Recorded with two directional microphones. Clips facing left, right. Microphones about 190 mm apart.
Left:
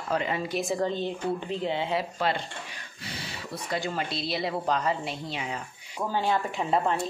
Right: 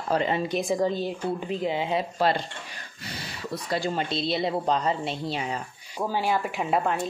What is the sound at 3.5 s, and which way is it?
Speech, 35° right (ahead or behind).